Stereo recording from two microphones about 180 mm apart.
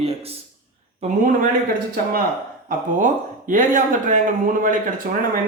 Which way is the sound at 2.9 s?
45° right (ahead or behind).